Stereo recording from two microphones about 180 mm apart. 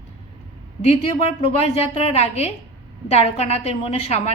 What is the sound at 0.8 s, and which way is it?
A woman's voice, 35° left (ahead or behind).